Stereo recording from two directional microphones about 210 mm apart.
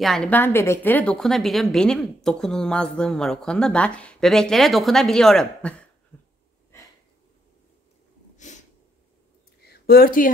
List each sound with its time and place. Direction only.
0.0 s a woman's voice: 5° left (ahead or behind)
8.4 s a sound: 35° left (ahead or behind)
9.7 s speech: 45° left (ahead or behind)